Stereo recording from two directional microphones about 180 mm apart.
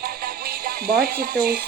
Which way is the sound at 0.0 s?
55° right (ahead or behind).